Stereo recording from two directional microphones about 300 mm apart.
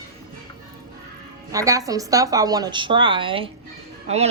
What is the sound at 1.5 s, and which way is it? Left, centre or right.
A woman's voice, centre.